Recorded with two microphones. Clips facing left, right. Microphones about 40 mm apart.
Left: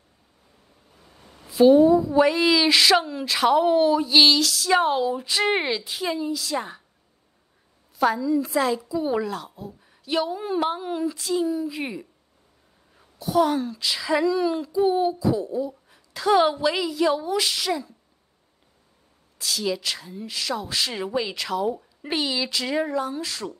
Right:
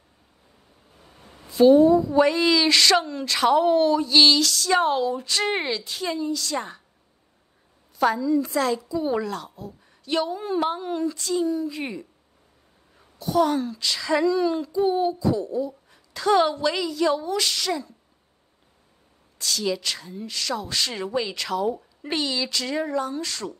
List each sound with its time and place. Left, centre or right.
1.1 s a sound: right
1.4 s a woman's voice: centre
8.0 s a woman's voice: centre
19.3 s a woman's voice: centre